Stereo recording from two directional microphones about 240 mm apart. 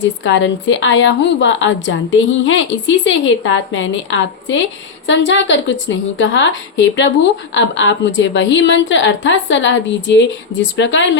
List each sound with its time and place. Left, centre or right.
0.3 s speech: left